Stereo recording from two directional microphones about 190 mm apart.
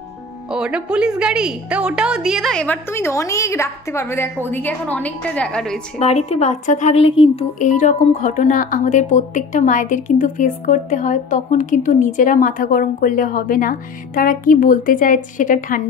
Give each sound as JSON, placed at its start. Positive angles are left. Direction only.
{"t": 0.5, "sound": "a woman's voice", "side_deg": -5}
{"t": 5.9, "sound": "speech", "side_deg": 35}